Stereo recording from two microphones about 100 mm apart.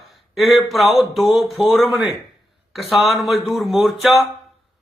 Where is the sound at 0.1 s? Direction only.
Centre (ahead or behind).